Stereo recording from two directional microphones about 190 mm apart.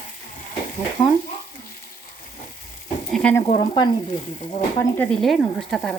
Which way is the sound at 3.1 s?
Centre (ahead or behind).